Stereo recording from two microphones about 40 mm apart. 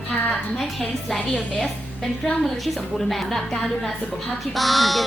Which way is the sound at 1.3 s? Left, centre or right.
Left.